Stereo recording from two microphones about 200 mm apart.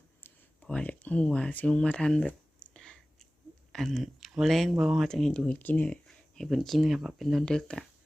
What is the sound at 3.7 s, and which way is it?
Speech, centre (ahead or behind).